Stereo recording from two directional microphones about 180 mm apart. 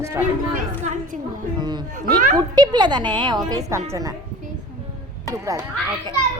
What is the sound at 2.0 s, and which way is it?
Speech, 50° right (ahead or behind).